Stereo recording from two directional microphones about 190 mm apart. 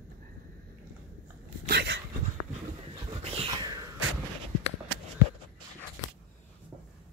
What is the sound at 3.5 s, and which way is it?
Whispering, 20° right (ahead or behind).